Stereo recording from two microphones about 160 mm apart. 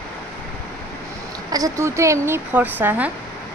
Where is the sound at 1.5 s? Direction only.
20° right (ahead or behind).